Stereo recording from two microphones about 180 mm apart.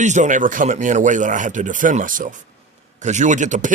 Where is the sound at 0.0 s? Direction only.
40° right (ahead or behind).